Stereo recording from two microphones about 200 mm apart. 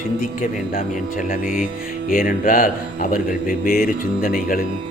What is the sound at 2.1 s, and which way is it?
Speech, 45° left (ahead or behind).